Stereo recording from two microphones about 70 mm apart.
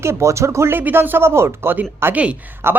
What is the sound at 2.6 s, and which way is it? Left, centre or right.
Speech, right.